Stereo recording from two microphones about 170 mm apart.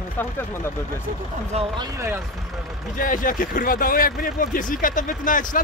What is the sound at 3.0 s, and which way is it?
Speech, 55° left (ahead or behind).